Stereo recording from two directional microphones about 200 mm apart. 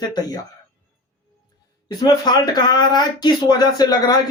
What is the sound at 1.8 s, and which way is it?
Speech, 20° left (ahead or behind).